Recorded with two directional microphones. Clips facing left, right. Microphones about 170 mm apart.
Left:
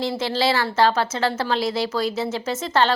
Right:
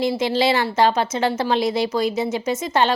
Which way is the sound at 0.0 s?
15° right (ahead or behind).